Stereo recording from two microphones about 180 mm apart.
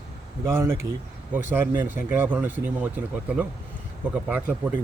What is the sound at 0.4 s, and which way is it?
Speech, 15° right (ahead or behind).